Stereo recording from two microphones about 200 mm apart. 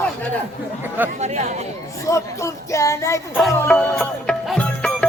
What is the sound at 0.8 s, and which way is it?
Chatter, 10° right (ahead or behind).